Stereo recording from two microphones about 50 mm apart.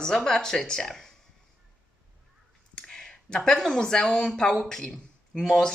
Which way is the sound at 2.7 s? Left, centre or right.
Centre.